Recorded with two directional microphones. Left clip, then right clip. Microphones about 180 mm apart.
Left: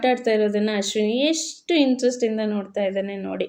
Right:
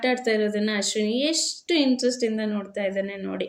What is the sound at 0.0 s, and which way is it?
Speech, 20° left (ahead or behind).